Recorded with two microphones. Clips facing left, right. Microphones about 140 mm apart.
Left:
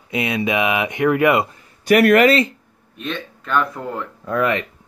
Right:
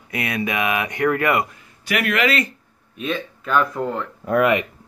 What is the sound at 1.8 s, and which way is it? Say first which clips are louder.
Speech: left 9 dB; 45° left (ahead or behind).